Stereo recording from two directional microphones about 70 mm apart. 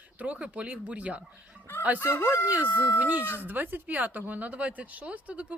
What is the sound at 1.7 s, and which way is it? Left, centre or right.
Speech, left.